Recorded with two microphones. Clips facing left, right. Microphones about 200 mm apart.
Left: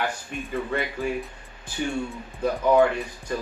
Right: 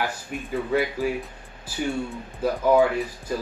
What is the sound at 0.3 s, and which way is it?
Speech, 5° right (ahead or behind).